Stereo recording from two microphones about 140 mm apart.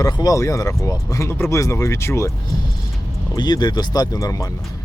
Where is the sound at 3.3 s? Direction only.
30° left (ahead or behind).